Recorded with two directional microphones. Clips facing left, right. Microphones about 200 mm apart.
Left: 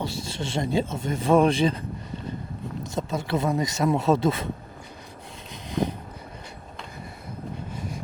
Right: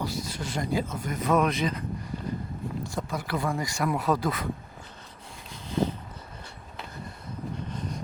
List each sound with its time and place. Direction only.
0.0 s speech: 25° left (ahead or behind)
2.8 s speech: 25° left (ahead or behind)
5.6 s a sound: 15° left (ahead or behind)